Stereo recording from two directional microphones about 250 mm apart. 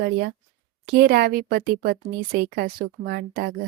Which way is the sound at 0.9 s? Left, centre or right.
Right.